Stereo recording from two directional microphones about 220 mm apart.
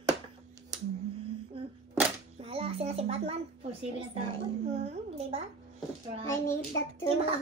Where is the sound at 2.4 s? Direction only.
25° right (ahead or behind).